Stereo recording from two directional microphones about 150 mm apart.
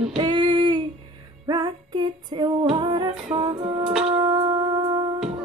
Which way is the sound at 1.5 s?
30° right (ahead or behind).